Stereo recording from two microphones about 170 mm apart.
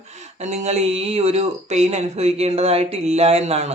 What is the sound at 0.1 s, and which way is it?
Speech, 40° right (ahead or behind).